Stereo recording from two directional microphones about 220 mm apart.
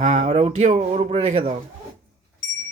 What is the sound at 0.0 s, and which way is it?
Speech, 30° right (ahead or behind).